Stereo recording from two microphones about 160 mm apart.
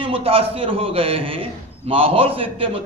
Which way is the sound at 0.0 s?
35° right (ahead or behind).